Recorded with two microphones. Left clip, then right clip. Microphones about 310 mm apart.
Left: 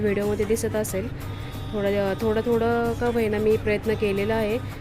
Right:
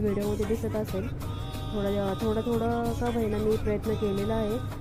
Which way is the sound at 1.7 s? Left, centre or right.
Centre.